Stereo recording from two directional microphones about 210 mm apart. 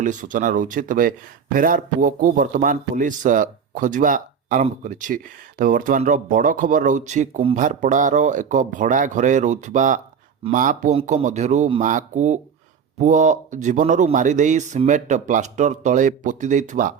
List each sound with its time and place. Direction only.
0.0 s speech: 35° right (ahead or behind)